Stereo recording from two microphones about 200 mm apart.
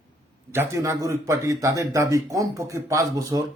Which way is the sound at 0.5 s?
10° right (ahead or behind).